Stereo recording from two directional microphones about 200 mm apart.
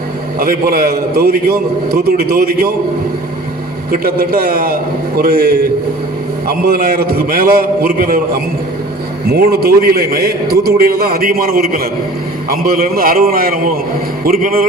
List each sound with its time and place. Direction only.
0.3 s a man's voice: 45° right (ahead or behind)
3.9 s a man's voice: 45° right (ahead or behind)
9.3 s a man's voice: 50° right (ahead or behind)